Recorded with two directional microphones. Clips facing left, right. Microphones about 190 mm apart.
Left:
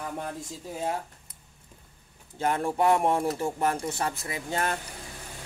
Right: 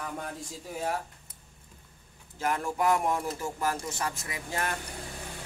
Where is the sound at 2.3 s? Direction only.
30° left (ahead or behind).